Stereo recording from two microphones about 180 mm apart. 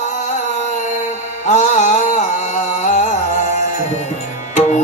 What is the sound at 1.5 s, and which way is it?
Music, 40° left (ahead or behind).